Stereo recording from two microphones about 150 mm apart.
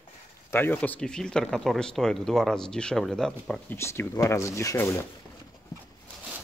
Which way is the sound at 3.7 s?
15° left (ahead or behind).